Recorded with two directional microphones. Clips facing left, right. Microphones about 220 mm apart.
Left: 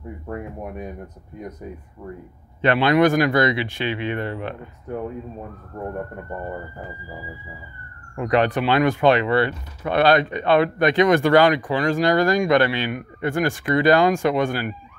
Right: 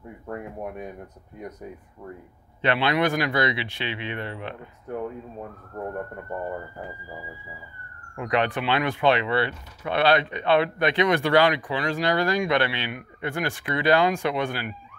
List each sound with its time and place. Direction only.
2.6 s speech: 45° left (ahead or behind)
8.2 s speech: 40° left (ahead or behind)